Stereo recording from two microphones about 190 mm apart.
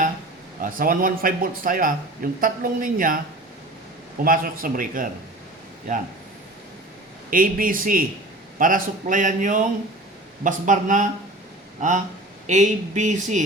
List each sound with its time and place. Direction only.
0.6 s a man's voice: 45° right (ahead or behind)
4.2 s a man's voice: 45° right (ahead or behind)
7.3 s a man's voice: 45° right (ahead or behind)